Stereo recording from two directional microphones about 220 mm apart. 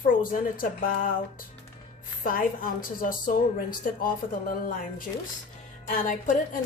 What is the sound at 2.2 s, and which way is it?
A woman's voice, 40° left (ahead or behind).